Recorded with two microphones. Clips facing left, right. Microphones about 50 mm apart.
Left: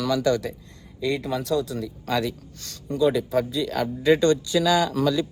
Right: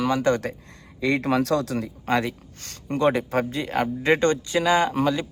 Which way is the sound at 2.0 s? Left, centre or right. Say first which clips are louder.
Right 2 dB; right.